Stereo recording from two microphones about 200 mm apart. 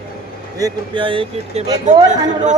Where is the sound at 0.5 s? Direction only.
20° right (ahead or behind).